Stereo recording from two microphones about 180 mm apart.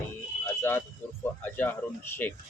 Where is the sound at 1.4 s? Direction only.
10° left (ahead or behind).